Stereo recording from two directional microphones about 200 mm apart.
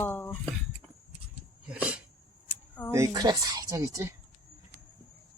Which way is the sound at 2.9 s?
15° right (ahead or behind).